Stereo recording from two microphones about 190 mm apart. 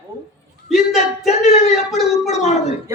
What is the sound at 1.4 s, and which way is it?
A man's voice, 35° left (ahead or behind).